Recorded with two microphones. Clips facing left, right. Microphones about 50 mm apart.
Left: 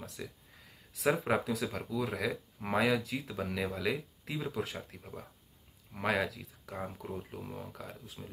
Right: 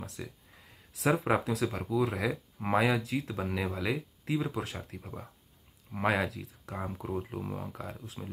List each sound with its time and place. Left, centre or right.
0.2 s speech: centre